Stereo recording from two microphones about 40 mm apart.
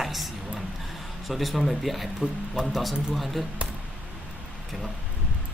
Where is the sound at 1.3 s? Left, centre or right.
Centre.